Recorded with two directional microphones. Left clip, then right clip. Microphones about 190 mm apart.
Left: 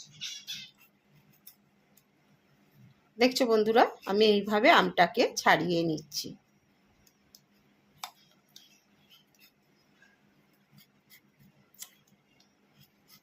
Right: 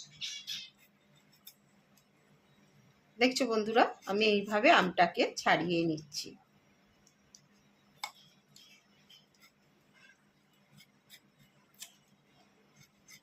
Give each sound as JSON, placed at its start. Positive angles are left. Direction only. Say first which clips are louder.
{"t": 3.2, "sound": "speech", "louder": "left 5 dB", "side_deg": 30}